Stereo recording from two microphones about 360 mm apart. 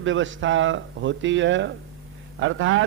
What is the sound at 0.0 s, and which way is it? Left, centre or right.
A man's voice, right.